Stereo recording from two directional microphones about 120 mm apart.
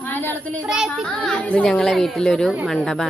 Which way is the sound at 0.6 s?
5° right (ahead or behind).